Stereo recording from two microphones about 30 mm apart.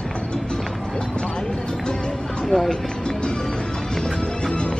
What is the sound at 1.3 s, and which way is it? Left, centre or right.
Music, left.